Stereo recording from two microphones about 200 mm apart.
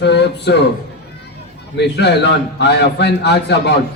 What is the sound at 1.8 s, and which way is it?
A man's voice, 60° left (ahead or behind).